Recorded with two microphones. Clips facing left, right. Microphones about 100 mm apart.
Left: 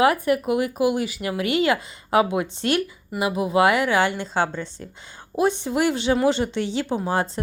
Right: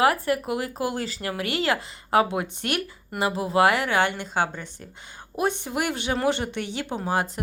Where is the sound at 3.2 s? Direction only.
15° left (ahead or behind).